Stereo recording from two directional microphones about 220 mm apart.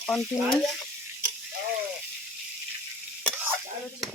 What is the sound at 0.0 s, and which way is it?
Speech, centre (ahead or behind).